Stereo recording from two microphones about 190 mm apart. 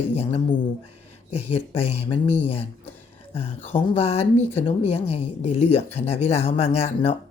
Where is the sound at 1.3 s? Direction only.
35° left (ahead or behind).